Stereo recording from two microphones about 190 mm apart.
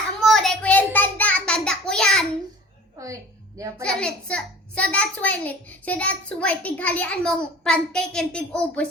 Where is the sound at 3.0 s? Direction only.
20° right (ahead or behind).